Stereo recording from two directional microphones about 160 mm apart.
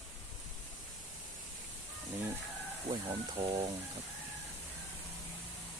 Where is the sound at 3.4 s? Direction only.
35° right (ahead or behind).